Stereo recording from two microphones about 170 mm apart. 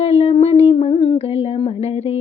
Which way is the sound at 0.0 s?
35° left (ahead or behind).